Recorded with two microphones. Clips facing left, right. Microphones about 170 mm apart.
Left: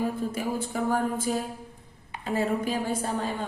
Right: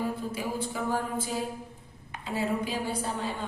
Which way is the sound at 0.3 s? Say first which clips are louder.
Left 2 dB; 50° left (ahead or behind).